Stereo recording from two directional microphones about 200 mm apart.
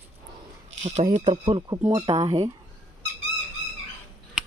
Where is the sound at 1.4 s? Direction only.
20° right (ahead or behind).